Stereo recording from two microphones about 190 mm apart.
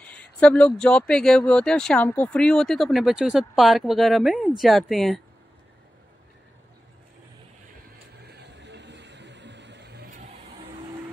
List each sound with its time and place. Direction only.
0.1 s speech: 5° left (ahead or behind)
8.2 s vehicle: 60° right (ahead or behind)